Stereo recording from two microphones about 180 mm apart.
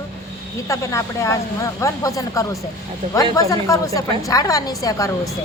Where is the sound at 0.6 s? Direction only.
15° left (ahead or behind).